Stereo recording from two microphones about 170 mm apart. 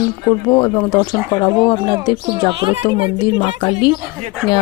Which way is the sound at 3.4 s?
30° left (ahead or behind).